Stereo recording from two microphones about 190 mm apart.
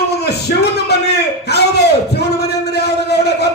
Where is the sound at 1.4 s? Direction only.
60° left (ahead or behind).